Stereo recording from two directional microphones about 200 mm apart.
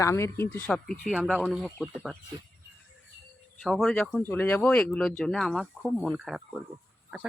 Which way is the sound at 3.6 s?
Centre (ahead or behind).